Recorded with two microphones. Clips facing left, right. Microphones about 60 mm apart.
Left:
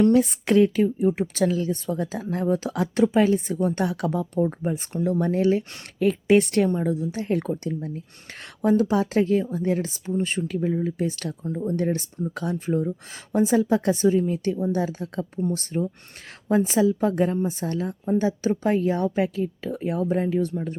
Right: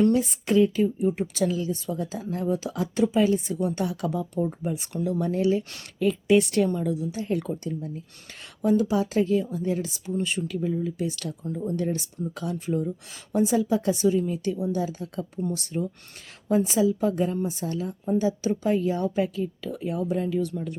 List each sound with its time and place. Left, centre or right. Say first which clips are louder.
0.1 s a woman's voice: left 4 dB; left